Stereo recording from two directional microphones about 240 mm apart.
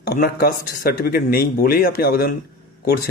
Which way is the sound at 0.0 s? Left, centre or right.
Left.